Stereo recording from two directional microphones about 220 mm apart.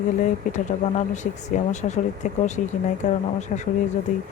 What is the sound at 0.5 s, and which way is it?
Speech, 35° left (ahead or behind).